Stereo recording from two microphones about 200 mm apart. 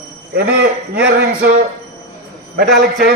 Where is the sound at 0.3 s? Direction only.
50° right (ahead or behind).